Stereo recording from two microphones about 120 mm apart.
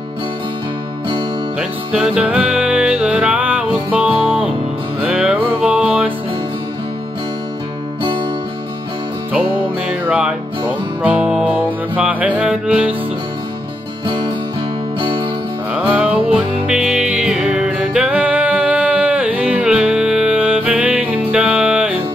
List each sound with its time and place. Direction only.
1.6 s music: 10° right (ahead or behind)
9.8 s music: 10° right (ahead or behind)
14.0 s music: 45° right (ahead or behind)
15.7 s music: 10° right (ahead or behind)